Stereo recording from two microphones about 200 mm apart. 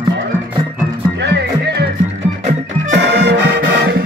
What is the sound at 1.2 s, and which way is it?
Music, 55° right (ahead or behind).